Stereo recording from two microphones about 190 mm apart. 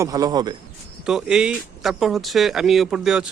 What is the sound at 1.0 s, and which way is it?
Speech, 5° right (ahead or behind).